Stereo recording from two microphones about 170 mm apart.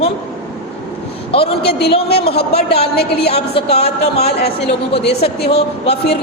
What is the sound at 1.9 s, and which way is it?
Speech, 35° left (ahead or behind).